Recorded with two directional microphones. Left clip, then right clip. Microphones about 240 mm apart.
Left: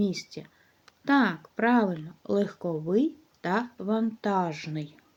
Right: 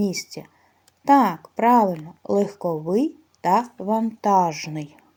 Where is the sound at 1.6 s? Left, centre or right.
Centre.